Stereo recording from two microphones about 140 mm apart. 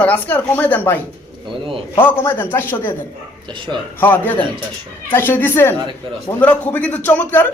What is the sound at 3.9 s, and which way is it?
Speech, 15° left (ahead or behind).